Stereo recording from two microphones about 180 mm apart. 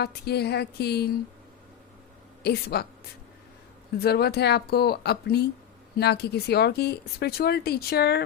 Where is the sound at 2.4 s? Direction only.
60° left (ahead or behind).